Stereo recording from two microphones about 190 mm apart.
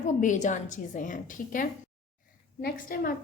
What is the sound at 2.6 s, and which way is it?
Speech, 55° left (ahead or behind).